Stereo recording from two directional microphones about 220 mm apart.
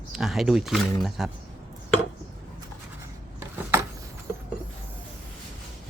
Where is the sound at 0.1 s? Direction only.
Centre (ahead or behind).